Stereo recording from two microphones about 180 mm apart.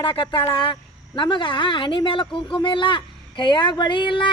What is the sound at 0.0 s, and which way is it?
Speech, 30° left (ahead or behind).